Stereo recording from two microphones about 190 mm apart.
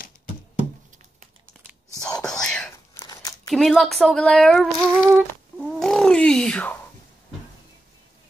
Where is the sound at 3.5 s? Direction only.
Centre (ahead or behind).